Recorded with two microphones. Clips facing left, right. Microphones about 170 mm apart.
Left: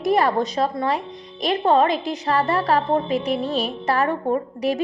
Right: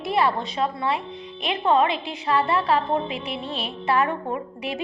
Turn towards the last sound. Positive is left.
turn(degrees=40)  # may be behind; listen again after turning